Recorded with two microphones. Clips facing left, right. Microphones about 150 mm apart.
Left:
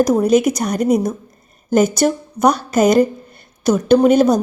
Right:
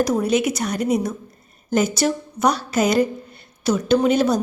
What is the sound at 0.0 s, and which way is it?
A woman's voice, 40° left (ahead or behind).